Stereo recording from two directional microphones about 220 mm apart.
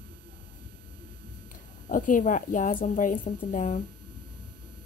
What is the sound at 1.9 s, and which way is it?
Speech, 35° left (ahead or behind).